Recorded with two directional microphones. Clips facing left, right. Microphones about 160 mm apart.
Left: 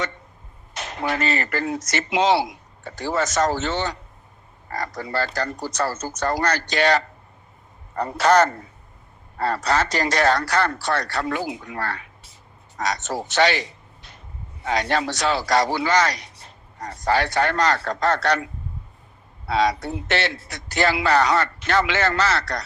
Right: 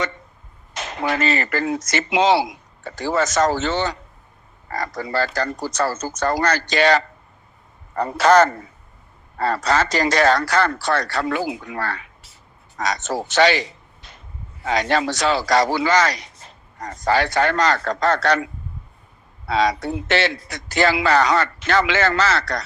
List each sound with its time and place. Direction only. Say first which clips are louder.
0.7 s a man's voice: right 2 dB; 90° right
19.5 s speech: right 1 dB; 90° right